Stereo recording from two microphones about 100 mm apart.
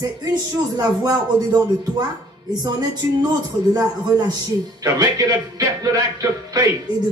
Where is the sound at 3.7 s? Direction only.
40° right (ahead or behind).